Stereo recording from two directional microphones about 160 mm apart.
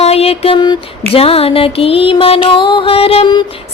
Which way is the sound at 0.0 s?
40° left (ahead or behind).